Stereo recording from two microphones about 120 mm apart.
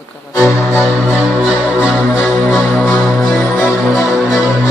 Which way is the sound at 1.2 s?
Centre (ahead or behind).